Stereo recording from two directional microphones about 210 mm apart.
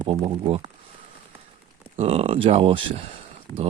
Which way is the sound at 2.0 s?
30° right (ahead or behind).